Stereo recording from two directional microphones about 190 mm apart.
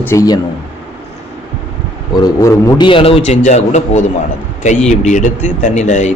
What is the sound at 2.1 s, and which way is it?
A man's voice, 20° left (ahead or behind).